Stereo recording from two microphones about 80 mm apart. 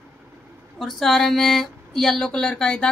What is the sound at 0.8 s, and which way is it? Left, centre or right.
Speech, centre.